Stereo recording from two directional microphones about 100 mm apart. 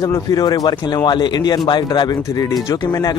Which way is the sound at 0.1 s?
40° left (ahead or behind).